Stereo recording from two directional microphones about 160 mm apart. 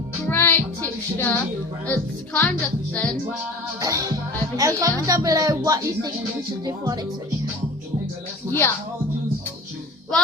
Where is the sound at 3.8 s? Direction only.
20° right (ahead or behind).